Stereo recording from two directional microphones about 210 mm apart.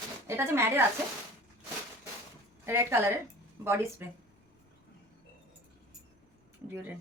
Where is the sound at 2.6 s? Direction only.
10° right (ahead or behind).